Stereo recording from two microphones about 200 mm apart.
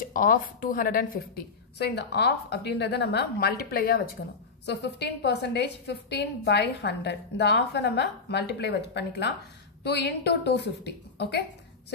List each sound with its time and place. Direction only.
0.0 s a woman's voice: 45° left (ahead or behind)